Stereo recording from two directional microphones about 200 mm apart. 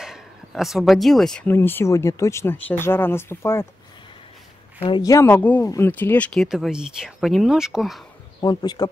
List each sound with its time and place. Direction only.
0.0 s speech: centre (ahead or behind)
4.8 s speech: 20° left (ahead or behind); by 8.0 s centre (ahead or behind)
8.4 s speech: 20° left (ahead or behind)